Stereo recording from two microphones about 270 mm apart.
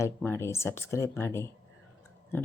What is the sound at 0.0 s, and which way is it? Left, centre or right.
Speech, centre.